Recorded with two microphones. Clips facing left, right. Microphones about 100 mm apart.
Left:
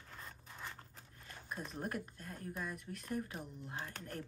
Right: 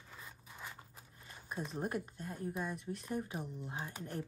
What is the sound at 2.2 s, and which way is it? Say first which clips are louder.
Speech: right 4 dB; 25° right (ahead or behind).